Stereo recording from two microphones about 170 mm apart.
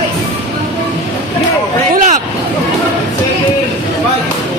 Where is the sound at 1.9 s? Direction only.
45° right (ahead or behind).